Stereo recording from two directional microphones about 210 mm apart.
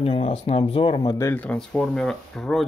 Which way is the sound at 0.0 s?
25° left (ahead or behind).